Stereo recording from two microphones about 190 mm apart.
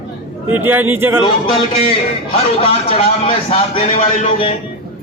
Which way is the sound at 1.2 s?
30° left (ahead or behind).